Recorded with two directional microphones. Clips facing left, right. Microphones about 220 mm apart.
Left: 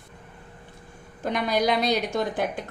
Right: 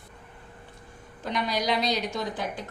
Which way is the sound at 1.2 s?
50° left (ahead or behind).